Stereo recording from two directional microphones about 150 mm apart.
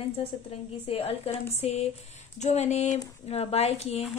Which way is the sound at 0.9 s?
40° left (ahead or behind).